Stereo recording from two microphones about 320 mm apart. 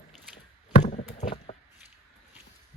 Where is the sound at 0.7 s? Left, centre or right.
Left.